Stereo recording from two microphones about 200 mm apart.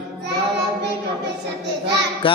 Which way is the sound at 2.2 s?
25° left (ahead or behind).